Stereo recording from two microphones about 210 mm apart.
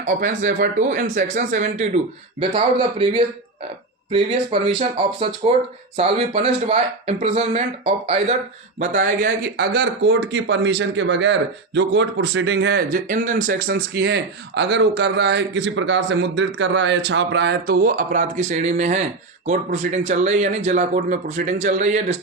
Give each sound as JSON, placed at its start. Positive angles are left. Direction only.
{"t": 0.0, "sound": "speech", "side_deg": -40}
{"t": 8.8, "sound": "speech", "side_deg": -40}
{"t": 13.7, "sound": "speech", "side_deg": -50}